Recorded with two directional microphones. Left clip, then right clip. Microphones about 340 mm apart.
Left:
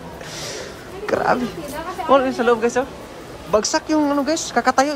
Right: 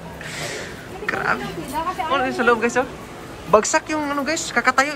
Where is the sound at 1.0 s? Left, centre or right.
Centre.